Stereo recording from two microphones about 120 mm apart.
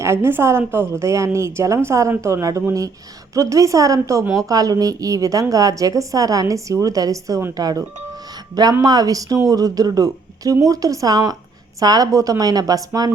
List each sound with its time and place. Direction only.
0.0 s a woman's voice: 20° right (ahead or behind)